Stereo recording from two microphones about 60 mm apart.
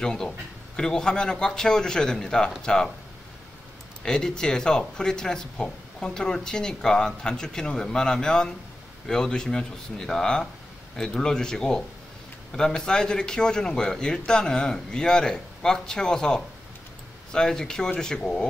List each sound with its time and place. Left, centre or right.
0.0 s speech: centre
4.0 s speech: centre